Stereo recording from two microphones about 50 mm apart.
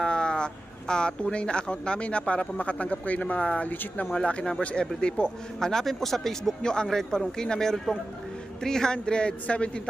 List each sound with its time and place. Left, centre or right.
0.0 s speech: centre
5.5 s speech: centre